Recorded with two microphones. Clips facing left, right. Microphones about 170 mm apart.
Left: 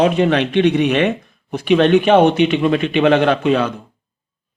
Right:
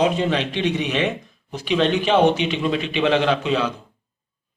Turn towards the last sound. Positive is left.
turn(degrees=55)  # may be behind; listen again after turning